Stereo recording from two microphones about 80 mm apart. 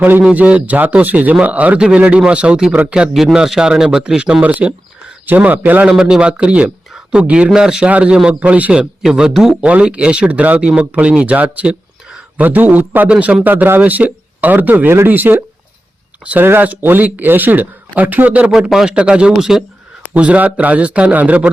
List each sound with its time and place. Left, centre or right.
0.0 s a man's voice: centre
5.9 s speech: centre
12.4 s a man's voice: right
18.5 s speech: centre
20.0 s speech: centre